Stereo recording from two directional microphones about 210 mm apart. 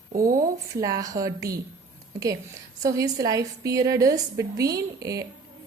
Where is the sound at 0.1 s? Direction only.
40° right (ahead or behind).